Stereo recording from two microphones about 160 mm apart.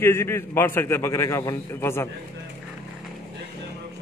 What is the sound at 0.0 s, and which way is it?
A man's voice, 15° left (ahead or behind).